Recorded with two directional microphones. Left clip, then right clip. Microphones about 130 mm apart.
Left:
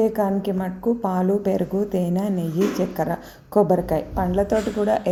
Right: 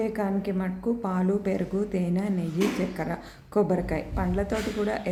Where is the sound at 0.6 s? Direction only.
15° left (ahead or behind).